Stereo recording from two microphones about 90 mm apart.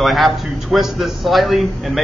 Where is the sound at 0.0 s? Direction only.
Centre (ahead or behind).